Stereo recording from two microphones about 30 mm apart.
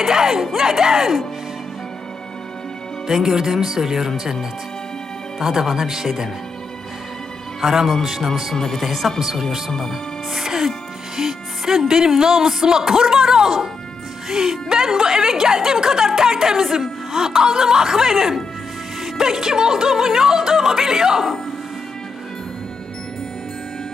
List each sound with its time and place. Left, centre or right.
0.0 s music: centre
3.2 s music: centre
5.4 s music: centre
7.6 s music: centre
8.5 s speech: centre
8.8 s speech: centre
9.2 s music: centre
10.3 s speech: centre
11.2 s music: centre